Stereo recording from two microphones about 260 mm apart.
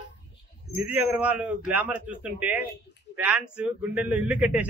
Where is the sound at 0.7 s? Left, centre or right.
Centre.